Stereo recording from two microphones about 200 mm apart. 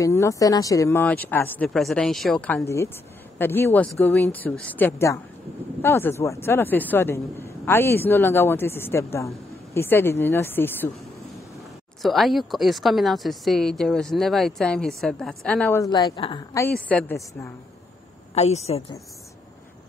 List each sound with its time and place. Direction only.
0.0 s speech: 15° left (ahead or behind)
12.0 s speech: centre (ahead or behind)
15.8 s speech: 20° left (ahead or behind)
16.5 s speech: 10° left (ahead or behind)
18.3 s a woman's voice: 30° left (ahead or behind)